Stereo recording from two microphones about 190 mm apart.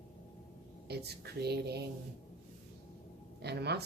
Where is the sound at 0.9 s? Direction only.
60° right (ahead or behind).